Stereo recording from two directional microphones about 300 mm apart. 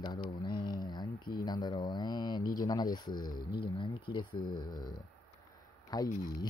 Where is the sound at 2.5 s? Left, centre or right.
Centre.